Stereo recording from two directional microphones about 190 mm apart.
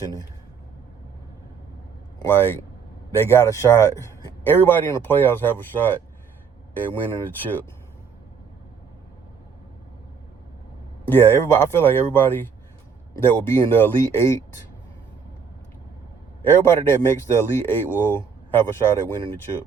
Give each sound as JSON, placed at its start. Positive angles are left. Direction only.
{"t": 0.0, "sound": "speech", "side_deg": 20}
{"t": 2.2, "sound": "speech", "side_deg": 10}
{"t": 11.1, "sound": "speech", "side_deg": 10}
{"t": 16.4, "sound": "speech", "side_deg": 15}